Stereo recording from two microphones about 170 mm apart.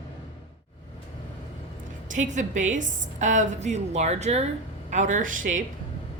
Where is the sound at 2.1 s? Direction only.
45° right (ahead or behind).